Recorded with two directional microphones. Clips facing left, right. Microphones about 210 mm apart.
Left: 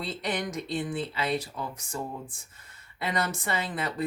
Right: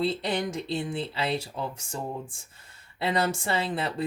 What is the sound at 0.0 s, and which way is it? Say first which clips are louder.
Speech: right 4 dB; 30° right (ahead or behind).